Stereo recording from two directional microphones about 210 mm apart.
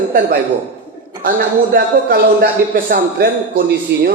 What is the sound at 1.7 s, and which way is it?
A man's voice, 45° right (ahead or behind).